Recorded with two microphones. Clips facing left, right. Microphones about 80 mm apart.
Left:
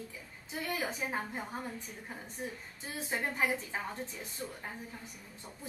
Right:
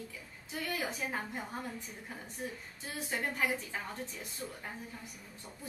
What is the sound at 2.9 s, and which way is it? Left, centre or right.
A woman's voice, left.